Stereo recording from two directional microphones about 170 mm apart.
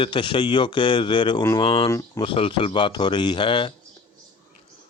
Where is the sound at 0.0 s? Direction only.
30° left (ahead or behind).